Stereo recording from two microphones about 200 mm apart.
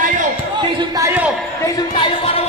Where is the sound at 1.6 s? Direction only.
20° left (ahead or behind).